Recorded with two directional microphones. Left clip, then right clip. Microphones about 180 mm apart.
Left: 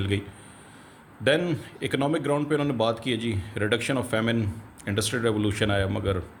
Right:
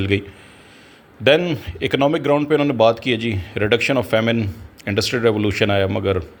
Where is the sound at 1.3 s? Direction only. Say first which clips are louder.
Right 8 dB; 30° right (ahead or behind).